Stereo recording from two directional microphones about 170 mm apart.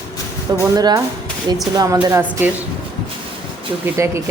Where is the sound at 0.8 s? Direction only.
20° right (ahead or behind).